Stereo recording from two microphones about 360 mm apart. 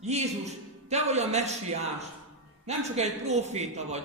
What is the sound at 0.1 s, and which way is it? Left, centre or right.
A man's voice, centre.